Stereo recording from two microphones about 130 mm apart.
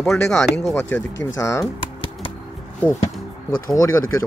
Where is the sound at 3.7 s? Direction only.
25° left (ahead or behind).